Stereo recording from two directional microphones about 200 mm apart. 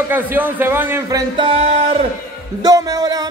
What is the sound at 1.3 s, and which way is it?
A man's voice, 25° right (ahead or behind).